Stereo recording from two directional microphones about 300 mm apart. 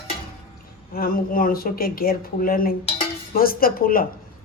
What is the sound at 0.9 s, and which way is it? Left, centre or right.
Speech, left.